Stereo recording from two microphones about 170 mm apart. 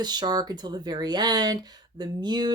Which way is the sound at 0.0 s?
25° right (ahead or behind).